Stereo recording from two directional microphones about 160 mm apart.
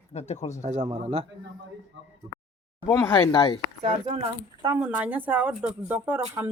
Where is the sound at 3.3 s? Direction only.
30° left (ahead or behind).